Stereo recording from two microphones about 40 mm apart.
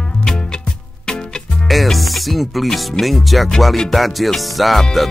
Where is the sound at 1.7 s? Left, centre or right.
Centre.